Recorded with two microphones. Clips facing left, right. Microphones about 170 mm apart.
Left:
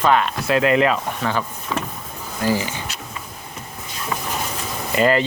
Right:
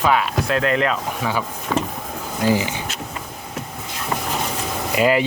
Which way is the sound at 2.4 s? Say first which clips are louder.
Right 2 dB; 15° right (ahead or behind).